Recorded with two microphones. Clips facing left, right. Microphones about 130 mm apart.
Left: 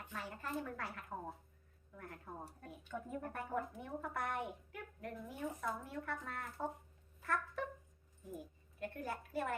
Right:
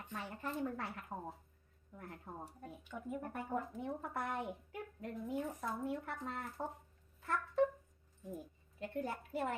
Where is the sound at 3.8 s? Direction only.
30° right (ahead or behind).